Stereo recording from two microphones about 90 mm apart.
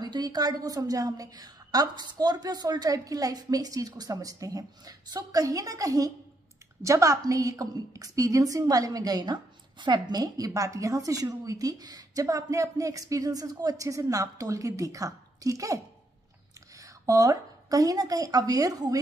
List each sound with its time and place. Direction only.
0.0 s a woman's voice: 50° right (ahead or behind)